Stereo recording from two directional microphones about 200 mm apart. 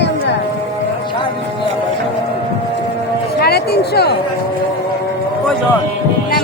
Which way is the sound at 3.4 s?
55° left (ahead or behind).